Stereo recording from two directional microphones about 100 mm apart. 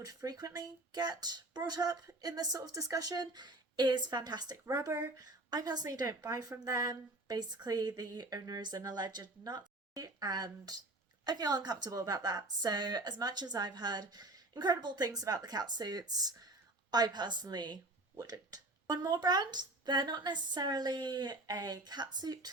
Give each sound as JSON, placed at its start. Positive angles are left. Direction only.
{"t": 0.0, "sound": "speech", "side_deg": -40}
{"t": 4.6, "sound": "a woman's voice", "side_deg": -30}